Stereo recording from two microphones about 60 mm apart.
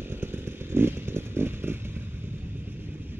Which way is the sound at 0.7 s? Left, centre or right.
Right.